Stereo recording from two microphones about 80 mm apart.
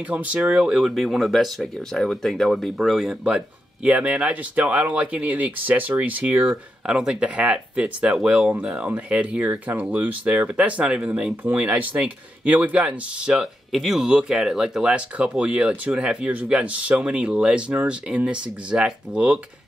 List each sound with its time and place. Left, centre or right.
0.0 s speech: centre